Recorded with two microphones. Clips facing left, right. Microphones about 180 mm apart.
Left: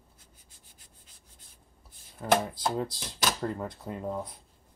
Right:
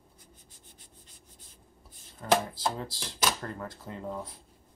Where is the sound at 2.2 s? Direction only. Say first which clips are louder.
Left 1 dB; 10° left (ahead or behind).